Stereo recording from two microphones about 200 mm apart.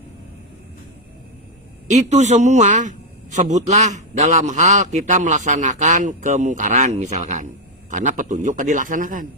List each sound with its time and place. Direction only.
1.9 s a man's voice: 35° right (ahead or behind)